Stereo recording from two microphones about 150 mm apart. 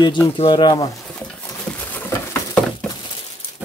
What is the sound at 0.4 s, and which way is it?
Speech, 30° left (ahead or behind).